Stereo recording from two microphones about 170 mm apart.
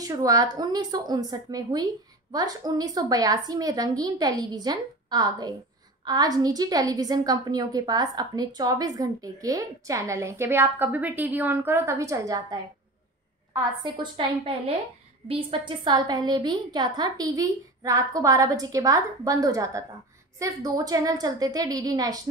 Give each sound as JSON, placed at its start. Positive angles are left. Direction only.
{"t": 0.0, "sound": "a woman's voice", "side_deg": -20}